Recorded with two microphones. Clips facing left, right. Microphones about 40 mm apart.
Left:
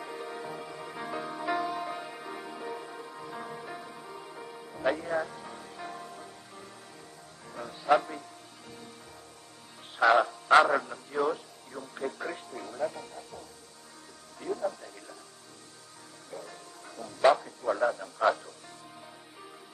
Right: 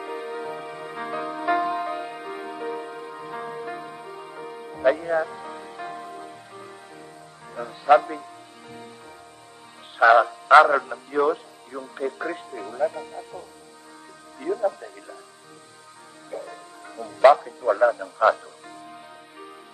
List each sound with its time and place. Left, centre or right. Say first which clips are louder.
0.0 s music: right 7 dB; right
10.0 s music: right 7 dB; right
10.8 s speech: right 7 dB; right
16.3 s music: right 8 dB; right